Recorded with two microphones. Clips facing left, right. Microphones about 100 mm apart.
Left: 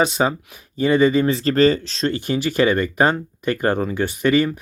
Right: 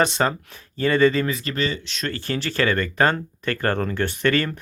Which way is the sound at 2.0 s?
20° left (ahead or behind).